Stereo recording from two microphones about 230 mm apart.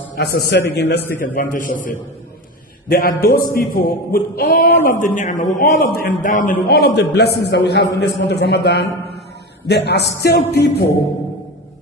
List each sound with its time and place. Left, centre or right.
0.2 s a man's voice: left
1.2 s speech: left
2.9 s a man's voice: left